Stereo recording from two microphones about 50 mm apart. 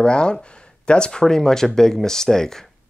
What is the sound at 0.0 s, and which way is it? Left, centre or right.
Speech, centre.